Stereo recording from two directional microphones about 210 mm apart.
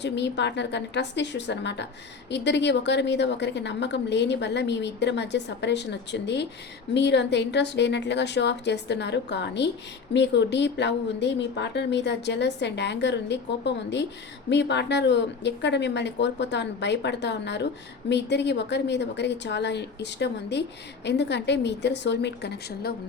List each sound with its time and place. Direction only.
0.0 s a woman's voice: 55° left (ahead or behind)